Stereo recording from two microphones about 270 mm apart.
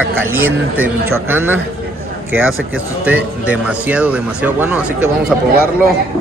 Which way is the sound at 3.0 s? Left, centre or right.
Centre.